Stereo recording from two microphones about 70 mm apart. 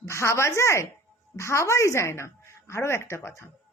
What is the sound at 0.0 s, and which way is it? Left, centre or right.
A woman's voice, left.